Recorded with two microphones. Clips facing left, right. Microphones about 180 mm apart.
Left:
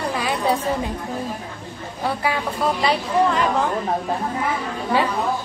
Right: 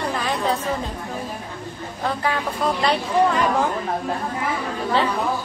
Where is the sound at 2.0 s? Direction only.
10° left (ahead or behind).